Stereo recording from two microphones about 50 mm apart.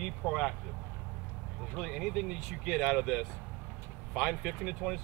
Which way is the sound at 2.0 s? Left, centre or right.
Centre.